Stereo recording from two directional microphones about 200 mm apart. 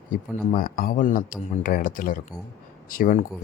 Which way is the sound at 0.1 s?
45° left (ahead or behind).